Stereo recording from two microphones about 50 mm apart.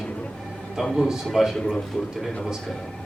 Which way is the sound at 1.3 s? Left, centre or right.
Centre.